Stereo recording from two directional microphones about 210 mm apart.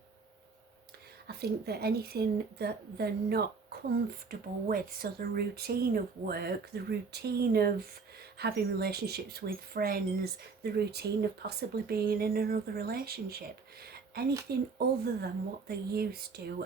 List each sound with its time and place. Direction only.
1.3 s speech: 50° right (ahead or behind)
13.8 s a sound: 50° right (ahead or behind)
15.0 s speech: 50° right (ahead or behind)